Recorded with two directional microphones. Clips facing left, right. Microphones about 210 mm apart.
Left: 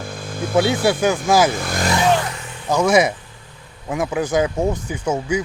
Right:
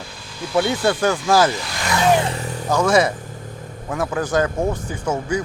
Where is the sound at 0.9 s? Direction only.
10° left (ahead or behind).